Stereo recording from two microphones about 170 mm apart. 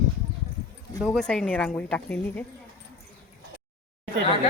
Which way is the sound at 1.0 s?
5° left (ahead or behind).